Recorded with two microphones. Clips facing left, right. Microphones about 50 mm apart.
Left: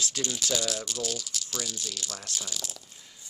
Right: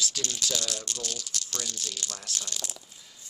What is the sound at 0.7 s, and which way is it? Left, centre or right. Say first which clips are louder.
Speech: left 3 dB; centre.